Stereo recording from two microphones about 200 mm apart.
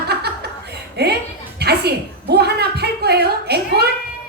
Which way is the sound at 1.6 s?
55° right (ahead or behind).